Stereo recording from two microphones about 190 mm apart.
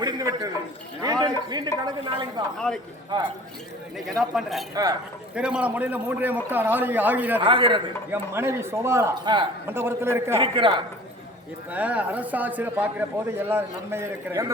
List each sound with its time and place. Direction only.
0.0 s a man's voice: 20° right (ahead or behind)
2.7 s a man's voice: 5° left (ahead or behind)
3.9 s a man's voice: centre (ahead or behind)
4.7 s a woman's voice: 20° right (ahead or behind)
5.3 s a man's voice: 5° right (ahead or behind)
7.4 s a woman's voice: 25° right (ahead or behind)
8.1 s a man's voice: 15° right (ahead or behind)
9.6 s a man's voice: 10° right (ahead or behind)
10.3 s a woman's voice: 25° right (ahead or behind)
11.7 s a man's voice: 5° right (ahead or behind)